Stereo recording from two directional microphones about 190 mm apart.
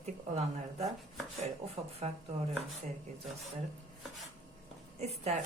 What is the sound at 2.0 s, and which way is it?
Speech, 30° right (ahead or behind).